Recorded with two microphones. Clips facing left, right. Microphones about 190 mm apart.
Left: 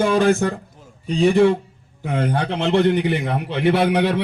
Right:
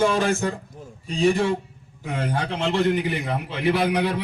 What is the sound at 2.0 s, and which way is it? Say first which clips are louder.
A man's voice: left 5 dB; 60° left (ahead or behind).